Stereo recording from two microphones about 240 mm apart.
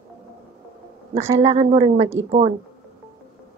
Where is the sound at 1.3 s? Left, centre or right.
Right.